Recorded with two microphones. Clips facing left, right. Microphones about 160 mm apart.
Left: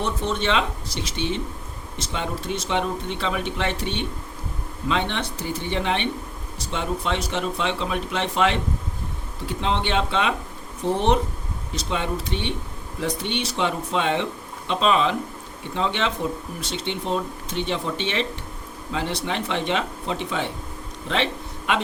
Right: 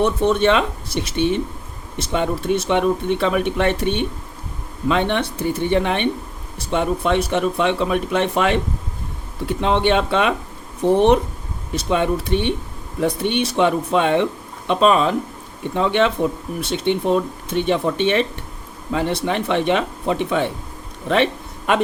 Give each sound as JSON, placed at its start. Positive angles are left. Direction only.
{"t": 0.0, "sound": "speech", "side_deg": -60}